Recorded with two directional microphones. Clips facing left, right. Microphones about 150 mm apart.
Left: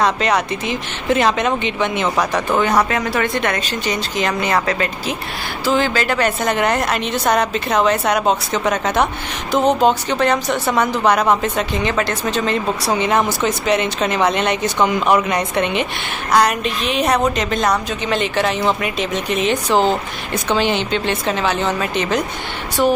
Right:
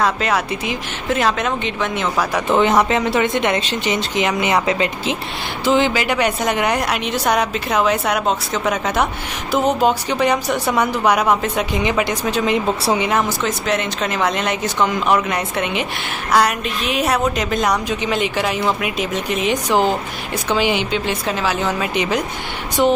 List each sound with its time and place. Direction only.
0.0 s speech: 5° right (ahead or behind)
2.4 s a woman's voice: 25° right (ahead or behind)
13.4 s a woman's voice: centre (ahead or behind); by 22.9 s 15° right (ahead or behind)